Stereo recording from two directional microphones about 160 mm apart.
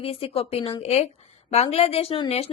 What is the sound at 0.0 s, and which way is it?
A woman's voice, 35° left (ahead or behind).